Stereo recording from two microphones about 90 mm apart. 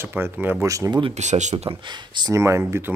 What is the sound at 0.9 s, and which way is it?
Speech, 70° right (ahead or behind).